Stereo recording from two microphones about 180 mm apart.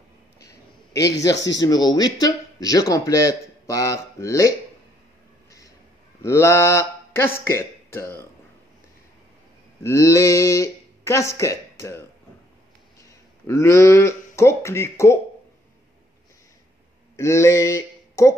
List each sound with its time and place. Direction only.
0.9 s a man's voice: 20° left (ahead or behind)
6.2 s speech: 15° left (ahead or behind)
9.8 s speech: 15° left (ahead or behind)
13.5 s speech: 15° left (ahead or behind)
17.2 s speech: 15° left (ahead or behind)